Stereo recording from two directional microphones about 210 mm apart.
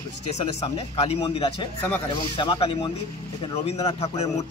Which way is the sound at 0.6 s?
30° left (ahead or behind).